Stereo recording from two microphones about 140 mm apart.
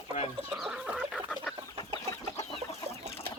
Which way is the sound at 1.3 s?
5° left (ahead or behind).